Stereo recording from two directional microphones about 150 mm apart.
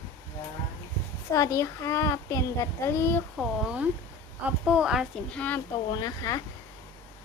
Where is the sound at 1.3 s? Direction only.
20° left (ahead or behind).